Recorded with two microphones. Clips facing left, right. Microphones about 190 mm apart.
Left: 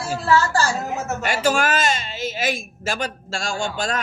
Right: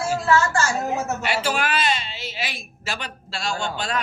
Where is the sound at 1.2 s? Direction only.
45° left (ahead or behind).